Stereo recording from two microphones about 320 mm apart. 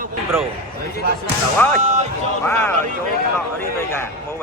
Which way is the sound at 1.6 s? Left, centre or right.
Centre.